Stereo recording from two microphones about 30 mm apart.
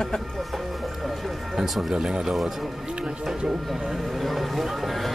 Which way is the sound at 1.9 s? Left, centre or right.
Right.